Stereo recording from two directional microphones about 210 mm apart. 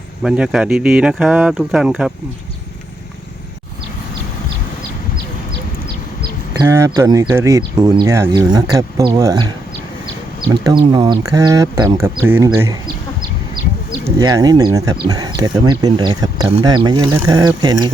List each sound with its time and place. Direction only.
0.2 s speech: 5° right (ahead or behind)
6.5 s speech: 15° right (ahead or behind)
10.5 s speech: 20° right (ahead or behind)
14.2 s speech: 15° right (ahead or behind)